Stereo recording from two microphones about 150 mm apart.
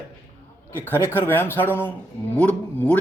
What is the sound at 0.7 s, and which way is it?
Speech, 10° left (ahead or behind).